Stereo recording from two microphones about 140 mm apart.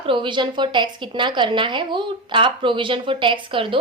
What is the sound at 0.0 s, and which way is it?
A woman's voice, 35° right (ahead or behind).